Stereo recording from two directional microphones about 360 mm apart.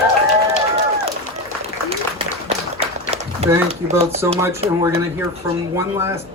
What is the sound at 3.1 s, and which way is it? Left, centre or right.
A man's voice, centre.